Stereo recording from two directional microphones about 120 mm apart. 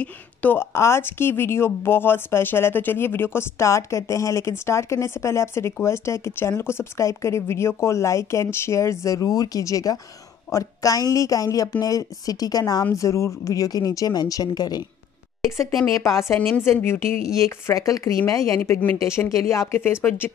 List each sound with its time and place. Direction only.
0.0 s a woman's voice: 15° left (ahead or behind); by 14.9 s 35° left (ahead or behind)
15.9 s a woman's voice: 25° left (ahead or behind)